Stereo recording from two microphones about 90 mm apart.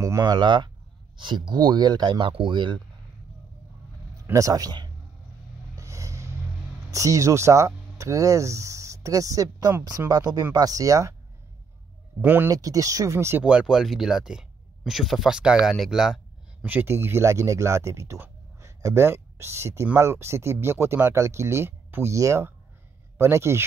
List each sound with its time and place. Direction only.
0.3 s speech: 55° right (ahead or behind)
4.3 s speech: 40° right (ahead or behind)
5.8 s vehicle: 35° right (ahead or behind)
6.9 s speech: 35° right (ahead or behind)
12.2 s speech: 20° right (ahead or behind)
12.4 s speech: 40° right (ahead or behind)
13.4 s speech: 10° right (ahead or behind)
16.6 s speech: 20° right (ahead or behind)